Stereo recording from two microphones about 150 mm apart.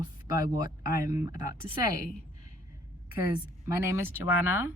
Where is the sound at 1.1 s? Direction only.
20° right (ahead or behind).